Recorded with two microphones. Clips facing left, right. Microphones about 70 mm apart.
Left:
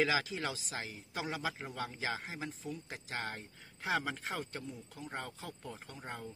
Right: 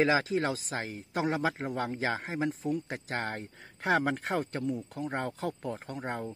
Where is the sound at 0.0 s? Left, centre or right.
Right.